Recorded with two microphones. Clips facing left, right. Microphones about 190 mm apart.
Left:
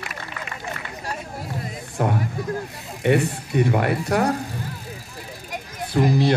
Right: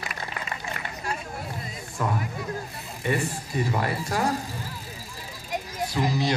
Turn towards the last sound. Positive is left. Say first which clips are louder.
# left 6 dB
turn(degrees=55)  # may be behind; listen again after turning